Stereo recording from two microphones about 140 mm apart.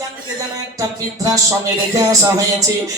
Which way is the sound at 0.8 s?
25° right (ahead or behind).